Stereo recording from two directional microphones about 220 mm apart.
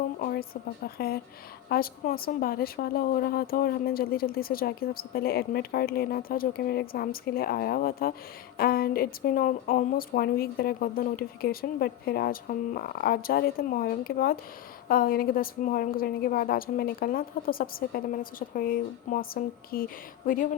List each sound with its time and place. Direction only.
0.2 s a woman's voice: 45° left (ahead or behind)